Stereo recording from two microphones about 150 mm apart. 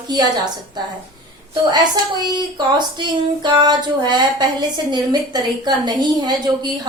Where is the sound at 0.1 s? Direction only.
30° right (ahead or behind).